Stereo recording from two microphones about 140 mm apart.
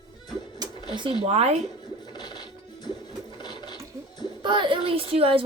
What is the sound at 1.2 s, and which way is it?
Speech, 45° right (ahead or behind).